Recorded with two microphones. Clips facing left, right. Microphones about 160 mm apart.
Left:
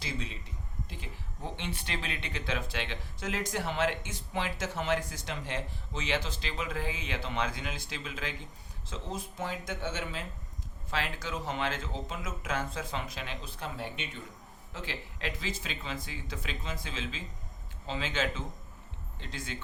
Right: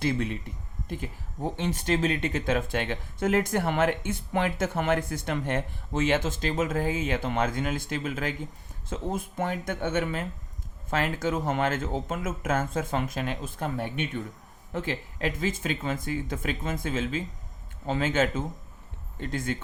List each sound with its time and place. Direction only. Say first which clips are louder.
0.0 s speech: right 11 dB; 55° right (ahead or behind)
0.9 s speech: right 9 dB; 45° right (ahead or behind)